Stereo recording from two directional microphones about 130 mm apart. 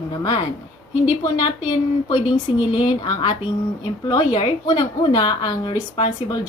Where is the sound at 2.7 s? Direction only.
40° left (ahead or behind).